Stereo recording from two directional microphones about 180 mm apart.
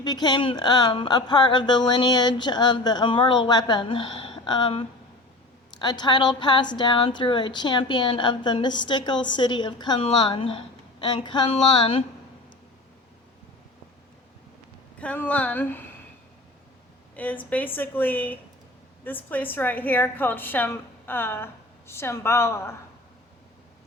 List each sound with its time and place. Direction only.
0.0 s speech: 25° left (ahead or behind)
14.9 s a woman's voice: 5° left (ahead or behind)
17.2 s a woman's voice: 10° left (ahead or behind)